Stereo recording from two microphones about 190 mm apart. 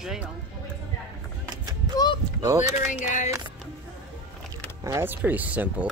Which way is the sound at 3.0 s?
40° left (ahead or behind).